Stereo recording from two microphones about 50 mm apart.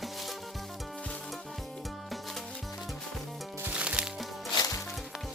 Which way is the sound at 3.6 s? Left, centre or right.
Right.